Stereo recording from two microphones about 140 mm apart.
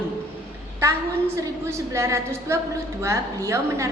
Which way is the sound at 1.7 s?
20° right (ahead or behind).